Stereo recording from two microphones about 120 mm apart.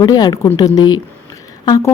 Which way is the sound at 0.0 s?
35° left (ahead or behind).